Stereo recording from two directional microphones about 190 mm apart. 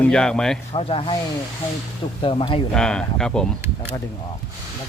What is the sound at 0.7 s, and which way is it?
Speech, 30° left (ahead or behind).